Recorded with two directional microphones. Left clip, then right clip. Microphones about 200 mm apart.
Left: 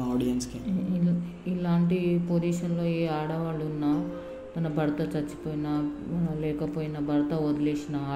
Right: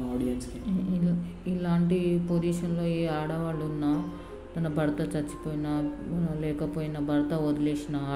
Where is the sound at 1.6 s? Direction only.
5° right (ahead or behind).